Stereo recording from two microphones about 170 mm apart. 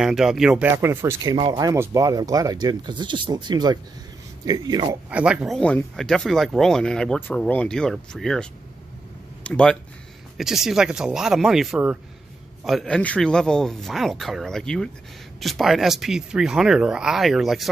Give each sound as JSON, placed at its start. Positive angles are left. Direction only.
{"t": 0.0, "sound": "speech", "side_deg": -5}
{"t": 5.1, "sound": "speech", "side_deg": -5}
{"t": 5.6, "sound": "speech", "side_deg": 5}